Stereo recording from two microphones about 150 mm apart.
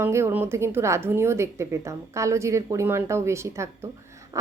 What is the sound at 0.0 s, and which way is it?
A woman's voice, 15° right (ahead or behind).